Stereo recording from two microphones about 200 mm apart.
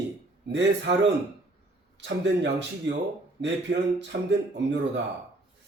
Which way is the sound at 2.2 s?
60° right (ahead or behind).